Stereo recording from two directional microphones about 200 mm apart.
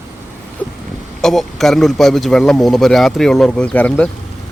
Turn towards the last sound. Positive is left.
turn(degrees=5)  # may be behind; listen again after turning